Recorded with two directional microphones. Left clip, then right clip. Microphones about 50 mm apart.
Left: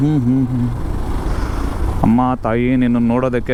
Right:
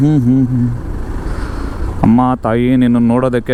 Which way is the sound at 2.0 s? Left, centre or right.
Right.